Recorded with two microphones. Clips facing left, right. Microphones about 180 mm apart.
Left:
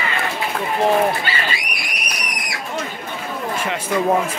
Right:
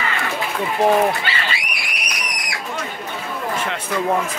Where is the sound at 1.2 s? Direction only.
45° left (ahead or behind).